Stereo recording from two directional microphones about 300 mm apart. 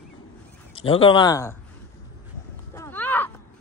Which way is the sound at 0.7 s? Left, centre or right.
Centre.